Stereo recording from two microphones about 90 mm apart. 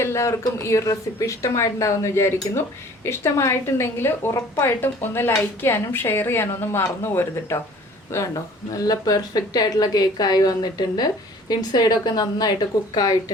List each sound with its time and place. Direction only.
0.0 s a woman's voice: 30° left (ahead or behind)
8.7 s speech: 45° left (ahead or behind)